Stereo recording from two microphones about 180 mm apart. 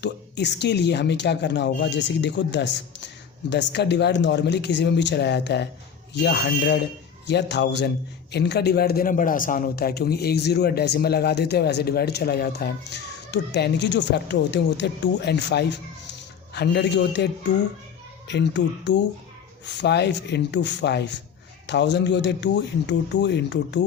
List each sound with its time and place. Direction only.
0.0 s a man's voice: 70° left (ahead or behind)